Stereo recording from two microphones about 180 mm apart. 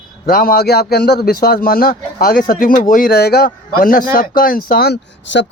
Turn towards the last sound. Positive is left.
turn(degrees=75)  # may be behind; listen again after turning